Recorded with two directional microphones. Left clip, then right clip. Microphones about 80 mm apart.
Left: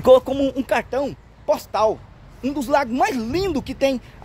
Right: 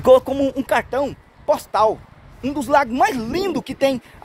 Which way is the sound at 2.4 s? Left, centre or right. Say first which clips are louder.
Right 1 dB; left.